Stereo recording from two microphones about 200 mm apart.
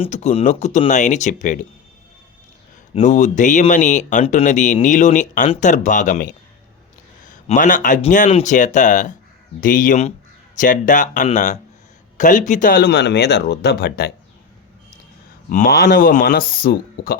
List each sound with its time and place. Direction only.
0.0 s speech: 35° left (ahead or behind)
2.9 s speech: 35° left (ahead or behind); by 14.1 s 50° left (ahead or behind)
15.4 s speech: 40° left (ahead or behind)